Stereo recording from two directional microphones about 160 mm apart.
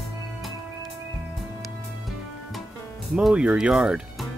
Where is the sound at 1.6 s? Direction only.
Centre (ahead or behind).